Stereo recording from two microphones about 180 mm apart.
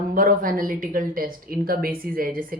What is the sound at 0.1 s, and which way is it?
Speech, 50° right (ahead or behind).